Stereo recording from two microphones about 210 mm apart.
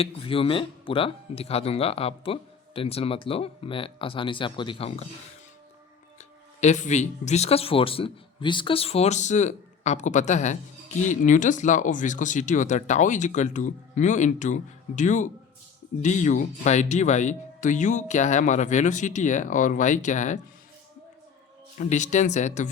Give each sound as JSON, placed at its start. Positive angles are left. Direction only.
{"t": 0.0, "sound": "speech", "side_deg": 25}
{"t": 6.1, "sound": "speech", "side_deg": 35}
{"t": 21.8, "sound": "speech", "side_deg": 35}